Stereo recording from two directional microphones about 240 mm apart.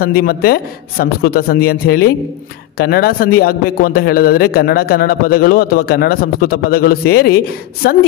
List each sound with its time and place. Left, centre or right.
0.0 s a man's voice: left